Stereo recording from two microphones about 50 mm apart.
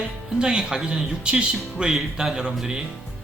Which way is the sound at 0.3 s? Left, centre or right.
Centre.